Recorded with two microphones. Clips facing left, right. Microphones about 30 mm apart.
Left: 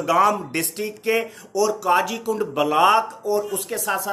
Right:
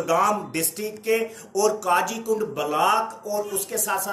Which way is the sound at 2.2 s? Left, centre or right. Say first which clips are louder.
Left 2 dB; left.